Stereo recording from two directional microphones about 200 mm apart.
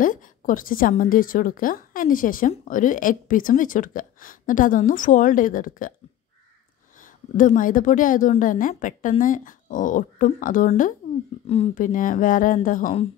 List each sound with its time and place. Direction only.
0.0 s a woman's voice: 40° left (ahead or behind)
7.3 s a woman's voice: 40° left (ahead or behind)
11.4 s a woman's voice: 30° left (ahead or behind)